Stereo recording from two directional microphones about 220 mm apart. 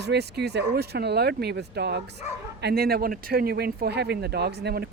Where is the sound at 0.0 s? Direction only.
50° right (ahead or behind).